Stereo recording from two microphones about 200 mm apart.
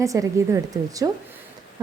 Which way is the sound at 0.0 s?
15° right (ahead or behind).